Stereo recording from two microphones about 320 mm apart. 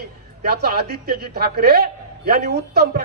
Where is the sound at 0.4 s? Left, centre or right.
Right.